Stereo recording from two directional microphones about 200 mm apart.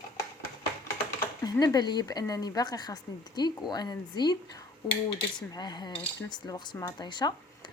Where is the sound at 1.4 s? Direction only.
20° left (ahead or behind).